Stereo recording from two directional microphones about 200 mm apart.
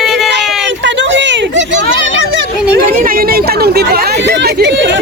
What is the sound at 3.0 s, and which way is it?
Speech, 45° right (ahead or behind).